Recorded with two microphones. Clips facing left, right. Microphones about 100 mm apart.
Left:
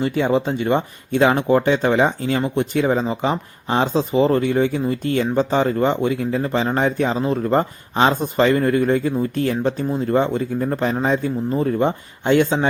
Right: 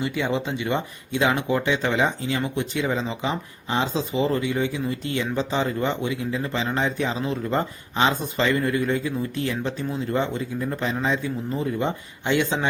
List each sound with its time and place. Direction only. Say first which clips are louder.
0.0 s speech: left 6 dB; 45° left (ahead or behind)